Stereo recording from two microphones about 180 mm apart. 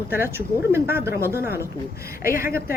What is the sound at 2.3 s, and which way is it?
Speech, 55° left (ahead or behind).